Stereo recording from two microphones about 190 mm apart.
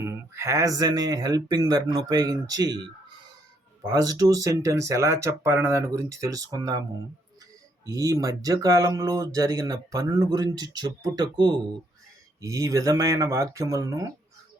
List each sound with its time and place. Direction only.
0.0 s speech: 15° right (ahead or behind)
3.8 s speech: 20° right (ahead or behind)
7.9 s speech: 15° right (ahead or behind)